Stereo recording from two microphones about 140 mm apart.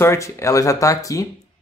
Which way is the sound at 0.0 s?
20° left (ahead or behind).